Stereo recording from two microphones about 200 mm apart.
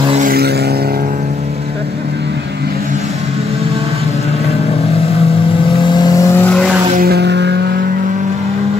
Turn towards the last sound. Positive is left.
turn(degrees=-55)  # may be behind; listen again after turning